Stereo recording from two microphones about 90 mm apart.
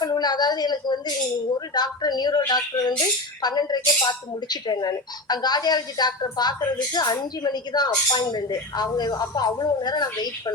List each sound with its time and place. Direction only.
0.0 s speech: 50° left (ahead or behind)